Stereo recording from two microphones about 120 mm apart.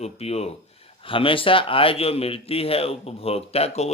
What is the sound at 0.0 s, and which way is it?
Speech, 60° left (ahead or behind).